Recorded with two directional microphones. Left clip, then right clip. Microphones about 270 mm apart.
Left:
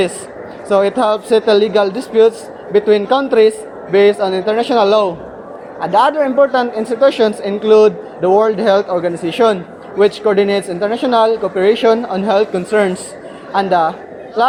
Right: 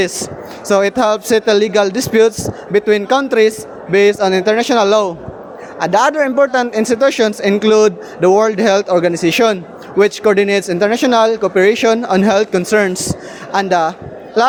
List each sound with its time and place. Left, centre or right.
0.7 s speech: right